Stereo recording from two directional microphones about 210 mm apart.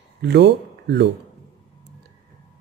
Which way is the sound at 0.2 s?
55° right (ahead or behind).